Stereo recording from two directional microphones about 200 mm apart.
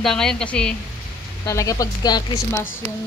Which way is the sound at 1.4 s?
15° left (ahead or behind).